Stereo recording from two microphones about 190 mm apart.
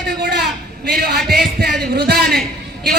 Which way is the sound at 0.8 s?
55° right (ahead or behind).